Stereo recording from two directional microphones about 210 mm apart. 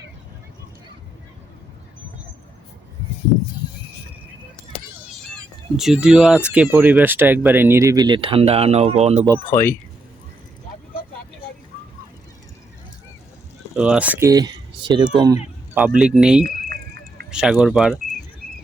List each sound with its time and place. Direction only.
5.3 s speech: centre (ahead or behind); by 9.2 s 30° right (ahead or behind)
9.5 s speech: 10° left (ahead or behind)
13.7 s speech: 5° right (ahead or behind); by 15.1 s 20° right (ahead or behind)
15.7 s speech: 5° right (ahead or behind)